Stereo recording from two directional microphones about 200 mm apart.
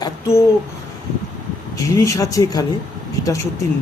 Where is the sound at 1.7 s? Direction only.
15° left (ahead or behind).